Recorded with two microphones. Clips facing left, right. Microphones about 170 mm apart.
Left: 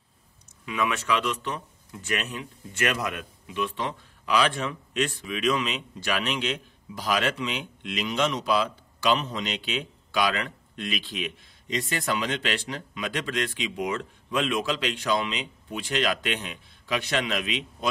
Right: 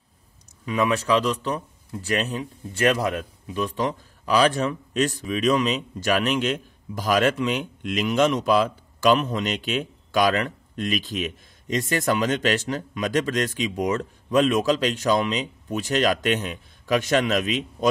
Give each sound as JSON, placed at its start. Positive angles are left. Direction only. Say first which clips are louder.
{"t": 0.7, "sound": "a man's voice", "louder": "right 5 dB", "side_deg": -35}